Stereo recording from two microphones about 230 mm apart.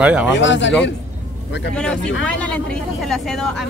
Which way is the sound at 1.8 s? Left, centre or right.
Centre.